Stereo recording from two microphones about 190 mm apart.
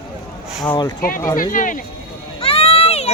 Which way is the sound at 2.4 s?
30° left (ahead or behind).